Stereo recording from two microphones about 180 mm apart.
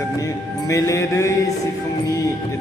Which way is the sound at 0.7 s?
15° left (ahead or behind).